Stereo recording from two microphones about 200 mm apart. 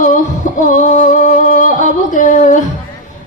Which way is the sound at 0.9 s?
40° left (ahead or behind).